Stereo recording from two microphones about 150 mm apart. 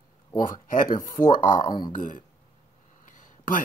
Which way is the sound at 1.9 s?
60° left (ahead or behind).